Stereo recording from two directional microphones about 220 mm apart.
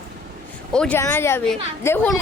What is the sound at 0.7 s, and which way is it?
A woman's voice, 5° left (ahead or behind).